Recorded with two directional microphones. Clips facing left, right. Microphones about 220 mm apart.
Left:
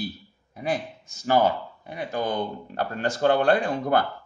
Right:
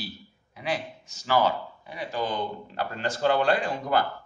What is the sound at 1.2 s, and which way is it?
Speech, 50° left (ahead or behind).